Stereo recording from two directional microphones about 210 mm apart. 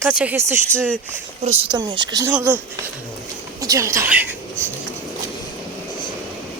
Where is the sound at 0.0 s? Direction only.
5° right (ahead or behind).